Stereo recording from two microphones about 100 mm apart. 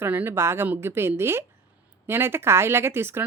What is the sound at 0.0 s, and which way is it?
Speech, 20° right (ahead or behind).